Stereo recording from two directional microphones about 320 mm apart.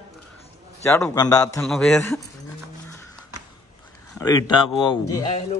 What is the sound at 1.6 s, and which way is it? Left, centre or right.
Speech, centre.